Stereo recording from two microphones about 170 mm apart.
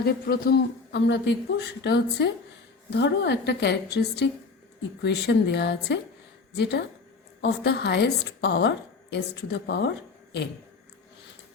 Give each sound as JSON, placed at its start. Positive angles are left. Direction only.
{"t": 0.0, "sound": "a woman's voice", "side_deg": 65}